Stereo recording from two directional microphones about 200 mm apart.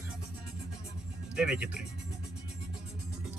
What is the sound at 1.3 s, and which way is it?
Speech, 5° right (ahead or behind).